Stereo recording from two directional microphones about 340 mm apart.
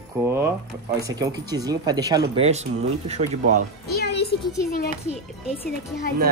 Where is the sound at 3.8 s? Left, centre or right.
Left.